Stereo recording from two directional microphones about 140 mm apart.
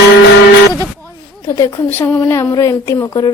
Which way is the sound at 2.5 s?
25° left (ahead or behind).